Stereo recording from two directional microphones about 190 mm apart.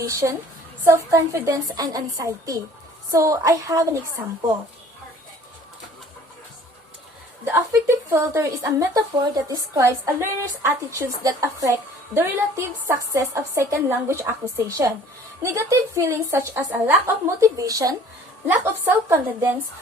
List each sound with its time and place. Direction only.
0.0 s a woman's voice: 15° right (ahead or behind)
7.4 s a woman's voice: 10° right (ahead or behind)